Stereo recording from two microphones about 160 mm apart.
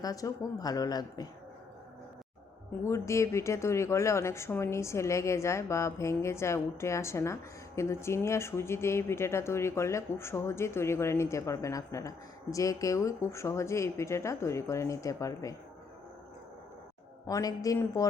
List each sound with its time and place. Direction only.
0.0 s speech: 20° left (ahead or behind)
2.8 s speech: 20° left (ahead or behind)
17.2 s speech: 20° left (ahead or behind)